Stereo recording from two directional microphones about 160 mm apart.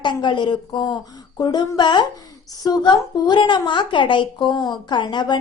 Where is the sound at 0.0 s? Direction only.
30° left (ahead or behind).